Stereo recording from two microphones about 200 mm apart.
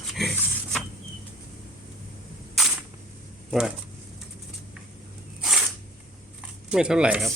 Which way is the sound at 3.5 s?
5° right (ahead or behind).